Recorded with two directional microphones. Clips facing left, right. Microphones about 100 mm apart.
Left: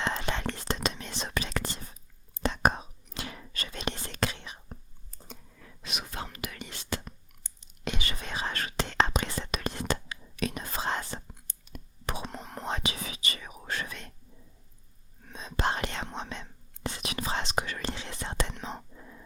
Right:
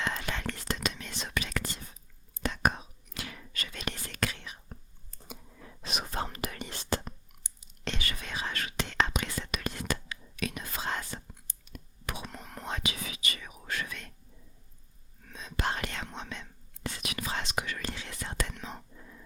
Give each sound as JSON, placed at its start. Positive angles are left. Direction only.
{"t": 0.0, "sound": "whispering", "side_deg": 30}
{"t": 5.3, "sound": "whispering", "side_deg": -20}
{"t": 5.8, "sound": "whispering", "side_deg": -35}
{"t": 7.4, "sound": "whispering", "side_deg": -20}
{"t": 7.9, "sound": "whispering", "side_deg": 20}
{"t": 15.2, "sound": "whispering", "side_deg": 30}